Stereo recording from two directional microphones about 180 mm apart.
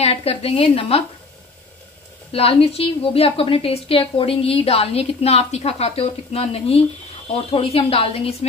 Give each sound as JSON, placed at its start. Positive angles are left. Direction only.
{"t": 0.0, "sound": "a woman's voice", "side_deg": 35}
{"t": 2.3, "sound": "a woman's voice", "side_deg": 35}